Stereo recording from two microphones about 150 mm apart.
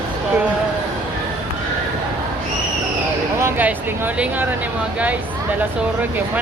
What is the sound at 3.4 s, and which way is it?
Speech, 15° right (ahead or behind).